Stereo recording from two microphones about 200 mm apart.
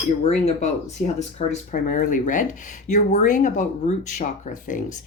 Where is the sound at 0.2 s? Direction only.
35° left (ahead or behind).